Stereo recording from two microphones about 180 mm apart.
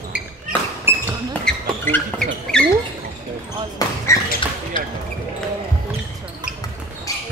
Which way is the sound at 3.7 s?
15° left (ahead or behind).